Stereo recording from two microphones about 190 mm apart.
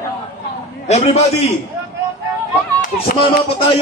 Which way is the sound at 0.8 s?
35° left (ahead or behind).